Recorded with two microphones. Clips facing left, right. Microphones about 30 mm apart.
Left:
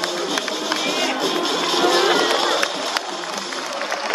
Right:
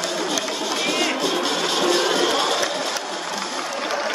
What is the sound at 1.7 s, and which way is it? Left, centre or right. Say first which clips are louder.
Music: left 4 dB; centre.